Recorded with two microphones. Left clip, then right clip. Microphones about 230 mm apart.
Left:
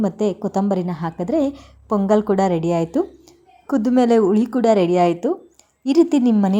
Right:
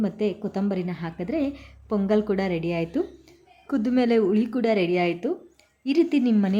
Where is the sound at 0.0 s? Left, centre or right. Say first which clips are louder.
Left 6 dB; centre.